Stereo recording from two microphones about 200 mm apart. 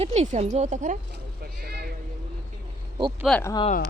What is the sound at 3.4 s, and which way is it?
Speech, 15° left (ahead or behind).